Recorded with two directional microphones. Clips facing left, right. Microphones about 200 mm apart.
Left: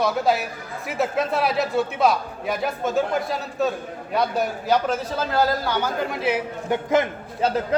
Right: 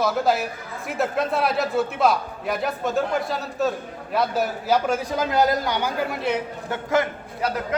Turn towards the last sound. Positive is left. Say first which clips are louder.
# left 3 dB
turn(degrees=25)  # may be behind; listen again after turning